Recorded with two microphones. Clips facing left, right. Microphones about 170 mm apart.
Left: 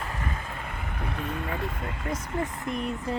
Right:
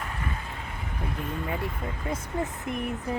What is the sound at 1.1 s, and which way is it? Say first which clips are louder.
Speech: even; 70° left (ahead or behind).